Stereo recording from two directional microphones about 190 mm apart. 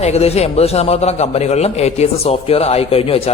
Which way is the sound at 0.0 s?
35° left (ahead or behind).